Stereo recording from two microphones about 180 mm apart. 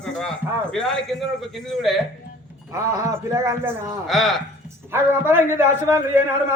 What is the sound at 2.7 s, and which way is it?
A man's voice, 15° right (ahead or behind).